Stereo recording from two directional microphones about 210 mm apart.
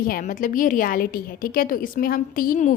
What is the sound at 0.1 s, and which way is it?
A woman's voice, 40° left (ahead or behind).